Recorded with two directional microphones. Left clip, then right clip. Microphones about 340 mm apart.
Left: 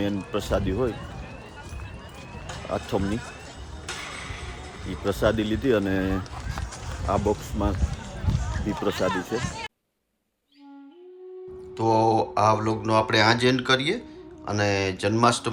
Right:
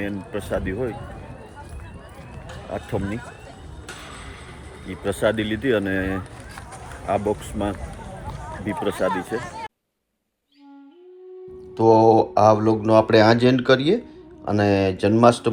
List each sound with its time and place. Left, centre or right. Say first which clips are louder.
0.0 s speech: left 1 dB; centre
2.7 s speech: left 1 dB; centre
5.0 s speech: right 2 dB; centre
9.0 s speech: right 3 dB; centre
11.8 s speech: right 7 dB; centre